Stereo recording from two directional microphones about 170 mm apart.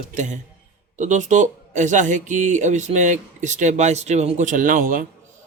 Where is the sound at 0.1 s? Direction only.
45° right (ahead or behind).